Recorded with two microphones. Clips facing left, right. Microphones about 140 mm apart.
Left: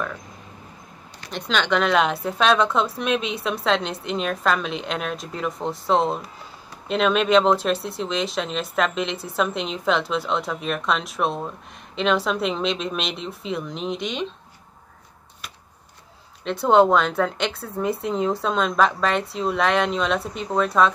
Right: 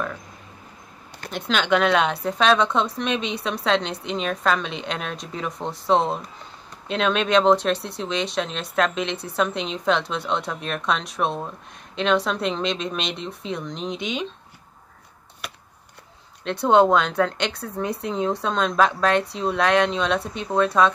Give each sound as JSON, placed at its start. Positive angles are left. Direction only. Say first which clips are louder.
{"t": 1.3, "sound": "speech", "louder": "right 1 dB", "side_deg": 0}
{"t": 15.4, "sound": "a sound", "louder": "right 5 dB", "side_deg": -65}
{"t": 16.4, "sound": "speech", "louder": "even", "side_deg": 0}